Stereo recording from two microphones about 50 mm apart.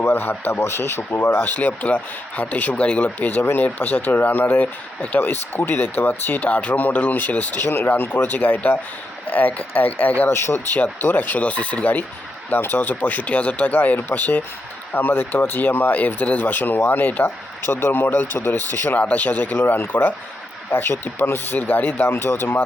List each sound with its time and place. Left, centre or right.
0.1 s a man's voice: left
0.6 s speech: left
5.1 s speech: left
6.1 s speech: left
7.6 s speech: left
10.2 s speech: left
11.0 s speech: left
12.5 s speech: left
17.6 s speech: left
18.9 s speech: left
22.0 s speech: left